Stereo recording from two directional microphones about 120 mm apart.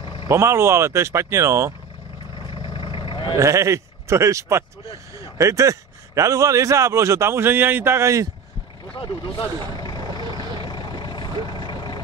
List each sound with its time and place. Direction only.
0.0 s a sound: 40° left (ahead or behind)
0.3 s a man's voice: 25° right (ahead or behind)
2.5 s vehicle: 45° left (ahead or behind)
3.3 s a man's voice: 25° right (ahead or behind)
9.8 s vehicle: 35° left (ahead or behind)